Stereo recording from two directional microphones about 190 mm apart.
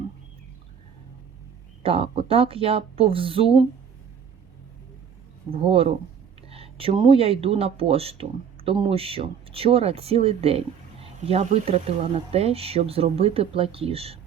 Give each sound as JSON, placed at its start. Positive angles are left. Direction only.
{"t": 1.8, "sound": "speech", "side_deg": -30}
{"t": 5.5, "sound": "speech", "side_deg": -30}